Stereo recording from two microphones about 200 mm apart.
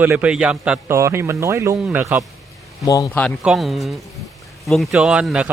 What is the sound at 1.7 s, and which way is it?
Speech, centre (ahead or behind).